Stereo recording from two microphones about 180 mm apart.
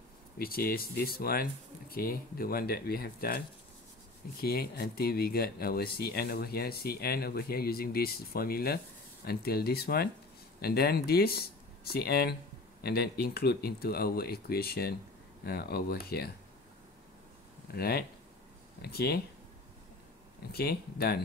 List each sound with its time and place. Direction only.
0.4 s speech: 55° left (ahead or behind)
17.7 s speech: 60° left (ahead or behind)
20.5 s speech: 60° left (ahead or behind)